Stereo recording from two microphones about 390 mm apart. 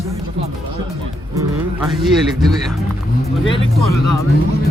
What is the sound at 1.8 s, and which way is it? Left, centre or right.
Speech, centre.